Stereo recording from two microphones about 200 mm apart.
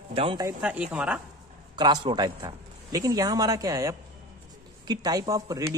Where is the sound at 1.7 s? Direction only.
20° right (ahead or behind).